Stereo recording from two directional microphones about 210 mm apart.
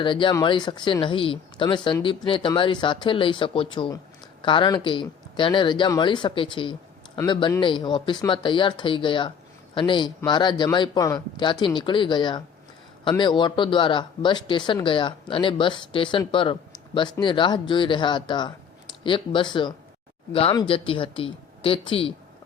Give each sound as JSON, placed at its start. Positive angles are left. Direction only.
{"t": 0.0, "sound": "speech", "side_deg": 25}